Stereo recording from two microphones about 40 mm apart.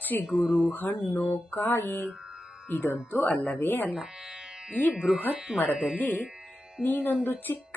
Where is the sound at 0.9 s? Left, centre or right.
Left.